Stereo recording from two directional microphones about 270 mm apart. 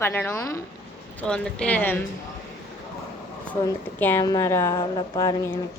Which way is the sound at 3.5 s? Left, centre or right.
Centre.